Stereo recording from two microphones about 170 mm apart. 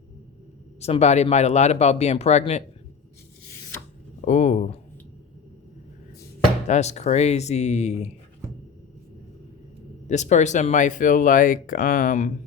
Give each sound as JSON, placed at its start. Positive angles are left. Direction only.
{"t": 0.8, "sound": "speech", "side_deg": 40}
{"t": 4.3, "sound": "speech", "side_deg": 45}
{"t": 6.7, "sound": "speech", "side_deg": 40}
{"t": 10.1, "sound": "speech", "side_deg": 45}